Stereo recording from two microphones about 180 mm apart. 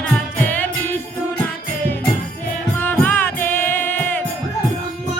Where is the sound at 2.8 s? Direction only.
10° left (ahead or behind).